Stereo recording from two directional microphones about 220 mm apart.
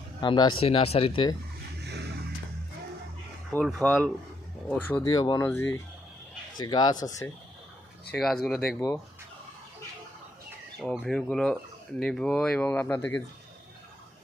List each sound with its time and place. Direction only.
0.2 s speech: 20° left (ahead or behind)
3.5 s speech: centre (ahead or behind)
8.1 s speech: centre (ahead or behind)
10.8 s speech: centre (ahead or behind)